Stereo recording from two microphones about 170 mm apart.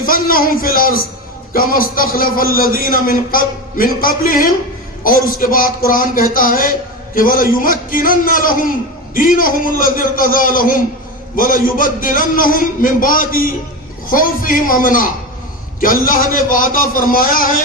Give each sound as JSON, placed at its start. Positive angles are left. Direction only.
{"t": 0.0, "sound": "a man's voice", "side_deg": 55}